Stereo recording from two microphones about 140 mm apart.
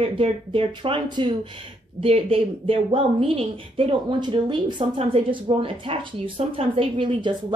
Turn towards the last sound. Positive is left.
turn(degrees=-35)  # may be behind; listen again after turning